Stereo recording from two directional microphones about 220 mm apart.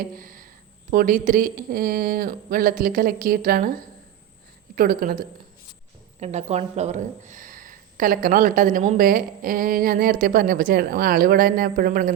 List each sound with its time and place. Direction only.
0.2 s speech: 40° right (ahead or behind)
6.1 s speech: 30° right (ahead or behind)